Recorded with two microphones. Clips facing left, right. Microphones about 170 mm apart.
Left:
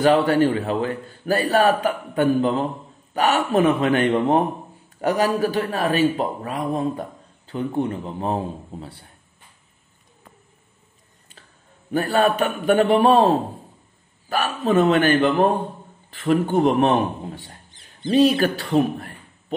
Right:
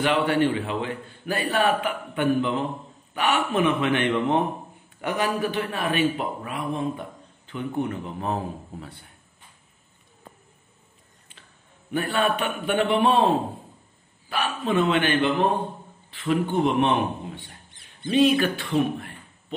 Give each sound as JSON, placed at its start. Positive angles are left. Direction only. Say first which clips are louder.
{"t": 0.0, "sound": "speech", "louder": "left 5 dB", "side_deg": 40}
{"t": 11.9, "sound": "a man's voice", "louder": "left 5 dB", "side_deg": 40}